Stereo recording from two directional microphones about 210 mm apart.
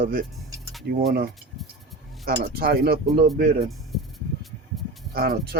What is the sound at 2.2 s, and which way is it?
Speech, 45° right (ahead or behind).